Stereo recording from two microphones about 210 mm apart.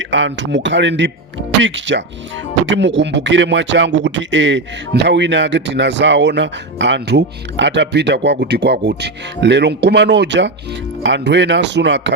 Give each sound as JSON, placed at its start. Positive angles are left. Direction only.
{"t": 0.0, "sound": "speech", "side_deg": -60}